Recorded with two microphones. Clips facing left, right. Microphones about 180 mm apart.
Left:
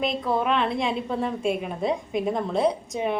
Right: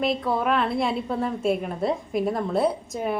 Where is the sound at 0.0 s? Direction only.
Centre (ahead or behind).